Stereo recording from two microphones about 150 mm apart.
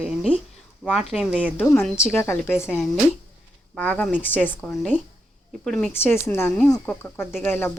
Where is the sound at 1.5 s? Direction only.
15° left (ahead or behind).